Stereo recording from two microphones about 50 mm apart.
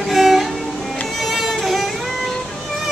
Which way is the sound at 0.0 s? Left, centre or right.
Centre.